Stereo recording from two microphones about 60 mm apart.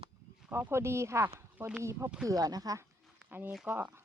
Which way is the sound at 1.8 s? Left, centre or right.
Right.